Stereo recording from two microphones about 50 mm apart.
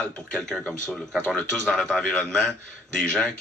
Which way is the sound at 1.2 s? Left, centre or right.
Left.